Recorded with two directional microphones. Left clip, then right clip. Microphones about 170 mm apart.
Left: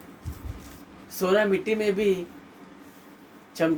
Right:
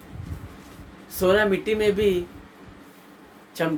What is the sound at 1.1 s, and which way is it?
Speech, 25° right (ahead or behind).